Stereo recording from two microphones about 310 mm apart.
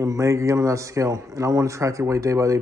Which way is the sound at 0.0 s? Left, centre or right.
Centre.